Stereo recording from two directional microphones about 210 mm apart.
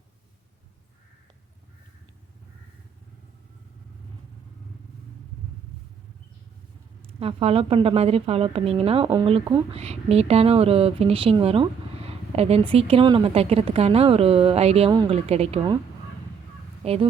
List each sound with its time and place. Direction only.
7.0 s a woman's voice: 25° right (ahead or behind)
16.8 s a woman's voice: 30° right (ahead or behind)